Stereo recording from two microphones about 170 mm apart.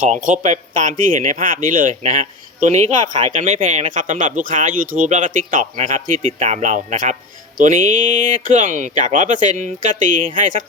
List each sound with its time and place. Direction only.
0.0 s speech: 50° right (ahead or behind)